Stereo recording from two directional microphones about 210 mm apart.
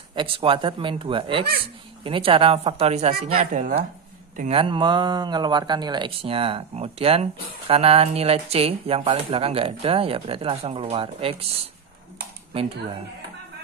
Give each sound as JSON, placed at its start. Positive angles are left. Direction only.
{"t": 0.1, "sound": "speech", "side_deg": -25}